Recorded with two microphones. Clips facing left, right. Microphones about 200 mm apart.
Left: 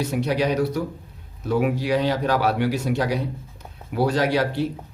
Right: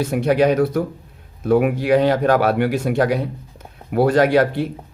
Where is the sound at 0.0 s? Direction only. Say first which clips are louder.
Right 6 dB; 55° right (ahead or behind).